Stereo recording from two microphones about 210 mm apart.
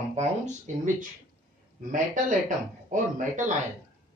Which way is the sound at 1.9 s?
40° right (ahead or behind).